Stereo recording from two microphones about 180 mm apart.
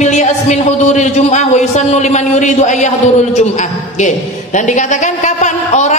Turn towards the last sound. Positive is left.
turn(degrees=40)  # may be behind; listen again after turning